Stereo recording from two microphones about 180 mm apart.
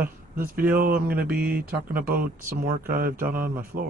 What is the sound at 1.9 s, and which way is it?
Speech, 55° right (ahead or behind).